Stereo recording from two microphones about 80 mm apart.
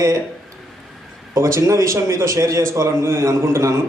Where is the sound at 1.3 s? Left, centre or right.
Right.